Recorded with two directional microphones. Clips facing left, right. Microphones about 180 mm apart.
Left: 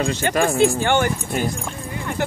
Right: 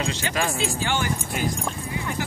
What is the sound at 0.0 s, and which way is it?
Speech, 50° left (ahead or behind).